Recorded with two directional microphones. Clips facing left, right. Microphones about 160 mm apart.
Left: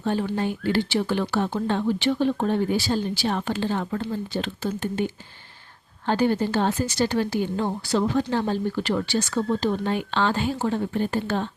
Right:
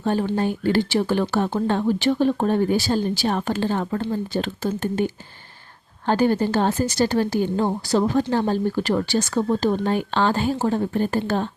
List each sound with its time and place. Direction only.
0.0 s a woman's voice: 45° right (ahead or behind)
6.1 s a woman's voice: 45° right (ahead or behind)